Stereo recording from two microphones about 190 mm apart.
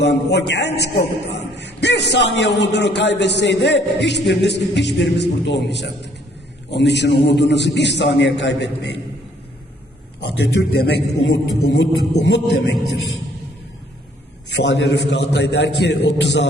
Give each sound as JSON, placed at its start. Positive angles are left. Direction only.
{"t": 0.0, "sound": "a man's voice", "side_deg": 65}
{"t": 10.2, "sound": "a man's voice", "side_deg": 60}
{"t": 12.2, "sound": "music", "side_deg": 70}
{"t": 14.5, "sound": "music", "side_deg": 70}
{"t": 15.1, "sound": "a man's voice", "side_deg": 65}